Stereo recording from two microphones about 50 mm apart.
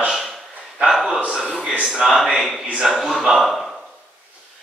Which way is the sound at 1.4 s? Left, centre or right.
Centre.